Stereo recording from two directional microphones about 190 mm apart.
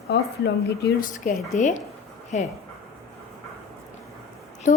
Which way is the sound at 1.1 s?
40° left (ahead or behind).